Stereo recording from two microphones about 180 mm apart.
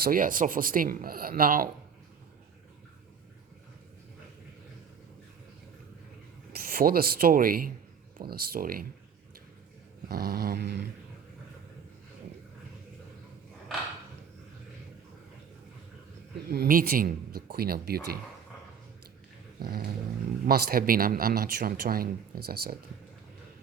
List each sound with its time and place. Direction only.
0.0 s a man's voice: 50° right (ahead or behind)
6.5 s a man's voice: 55° right (ahead or behind)
10.1 s a man's voice: 60° right (ahead or behind)
16.5 s a man's voice: 55° right (ahead or behind)
19.5 s dog: 55° right (ahead or behind)
20.4 s a man's voice: 55° right (ahead or behind)